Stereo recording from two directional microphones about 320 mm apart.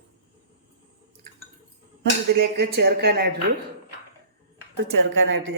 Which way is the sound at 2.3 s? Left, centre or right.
Right.